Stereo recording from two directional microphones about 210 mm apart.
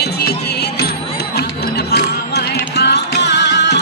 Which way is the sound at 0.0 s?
50° left (ahead or behind).